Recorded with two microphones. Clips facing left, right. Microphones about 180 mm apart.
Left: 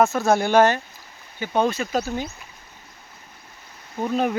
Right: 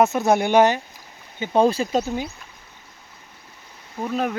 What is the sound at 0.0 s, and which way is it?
Speech, 20° right (ahead or behind).